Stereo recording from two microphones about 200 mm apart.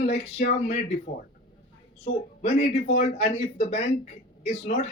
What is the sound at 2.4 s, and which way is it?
Speech, 35° left (ahead or behind).